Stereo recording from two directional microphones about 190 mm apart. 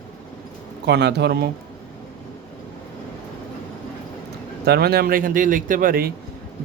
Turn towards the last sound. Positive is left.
turn(degrees=-50)  # may be behind; listen again after turning